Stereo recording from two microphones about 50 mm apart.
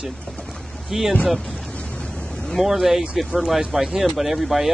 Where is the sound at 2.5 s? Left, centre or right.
Centre.